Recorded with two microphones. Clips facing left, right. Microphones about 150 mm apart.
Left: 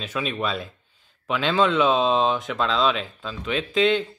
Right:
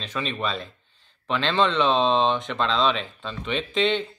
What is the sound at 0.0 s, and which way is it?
A man's voice, 5° left (ahead or behind).